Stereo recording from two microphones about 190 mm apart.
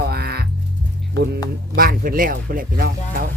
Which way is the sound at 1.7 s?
50° right (ahead or behind).